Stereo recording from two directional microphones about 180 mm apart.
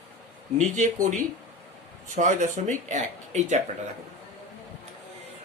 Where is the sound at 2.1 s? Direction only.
45° right (ahead or behind).